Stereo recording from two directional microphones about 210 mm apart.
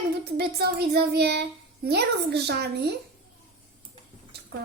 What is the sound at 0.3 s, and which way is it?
Speech, 50° right (ahead or behind).